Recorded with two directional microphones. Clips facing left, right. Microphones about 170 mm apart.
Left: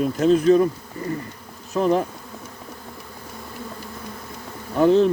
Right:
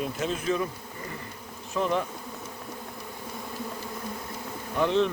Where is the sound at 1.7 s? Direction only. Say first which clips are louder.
Left 7 dB; 35° left (ahead or behind).